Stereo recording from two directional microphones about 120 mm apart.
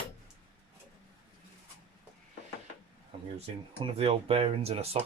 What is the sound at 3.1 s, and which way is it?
Speech, 55° right (ahead or behind).